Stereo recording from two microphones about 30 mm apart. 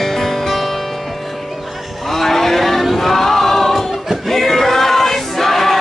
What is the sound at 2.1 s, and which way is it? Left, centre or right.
Vehicle, centre.